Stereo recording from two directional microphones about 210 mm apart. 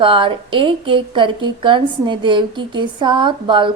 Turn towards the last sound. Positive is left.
turn(degrees=-20)  # may be behind; listen again after turning